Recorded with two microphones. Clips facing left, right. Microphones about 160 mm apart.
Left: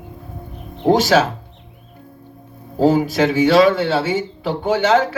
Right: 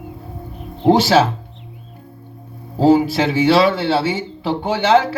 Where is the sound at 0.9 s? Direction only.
45° left (ahead or behind).